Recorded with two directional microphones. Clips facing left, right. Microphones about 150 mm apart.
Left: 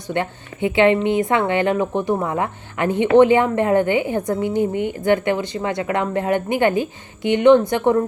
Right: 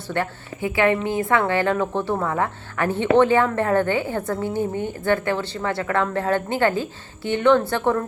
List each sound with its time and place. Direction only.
0.1 s a woman's voice: 20° left (ahead or behind)